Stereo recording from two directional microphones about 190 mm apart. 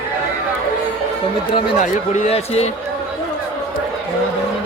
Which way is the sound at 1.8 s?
35° left (ahead or behind).